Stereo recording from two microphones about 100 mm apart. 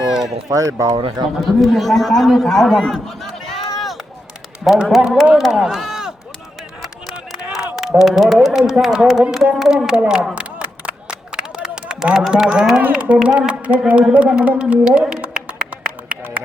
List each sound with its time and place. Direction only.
0.1 s speech: 5° right (ahead or behind)
0.4 s speech: 35° right (ahead or behind)
1.4 s a man's voice: centre (ahead or behind)
3.8 s run: centre (ahead or behind)
4.6 s a man's voice: 5° right (ahead or behind)
8.0 s a man's voice: centre (ahead or behind)
9.6 s a sound: 5° right (ahead or behind)
12.8 s speech: 10° right (ahead or behind)
16.0 s a sound: 15° right (ahead or behind)